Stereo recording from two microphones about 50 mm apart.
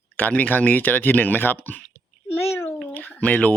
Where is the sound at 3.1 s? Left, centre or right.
Left.